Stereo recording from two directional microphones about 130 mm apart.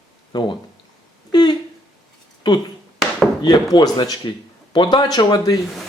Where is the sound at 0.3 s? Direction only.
30° left (ahead or behind).